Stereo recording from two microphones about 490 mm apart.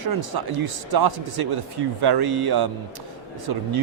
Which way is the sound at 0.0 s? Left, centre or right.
Right.